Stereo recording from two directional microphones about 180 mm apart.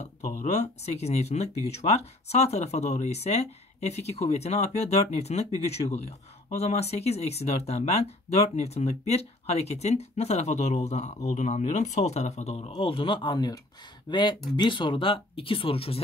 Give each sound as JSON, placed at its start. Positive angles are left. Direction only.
{"t": 0.0, "sound": "speech", "side_deg": 40}